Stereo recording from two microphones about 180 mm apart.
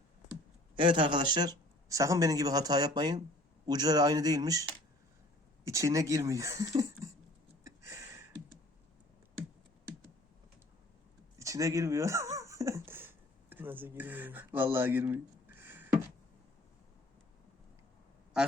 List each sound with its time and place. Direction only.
0.8 s speech: 25° right (ahead or behind)
5.6 s speech: 15° right (ahead or behind)
7.6 s a sound: 15° right (ahead or behind)
11.3 s speech: 15° right (ahead or behind)
15.5 s a sound: 10° right (ahead or behind)
18.3 s quack: 5° right (ahead or behind)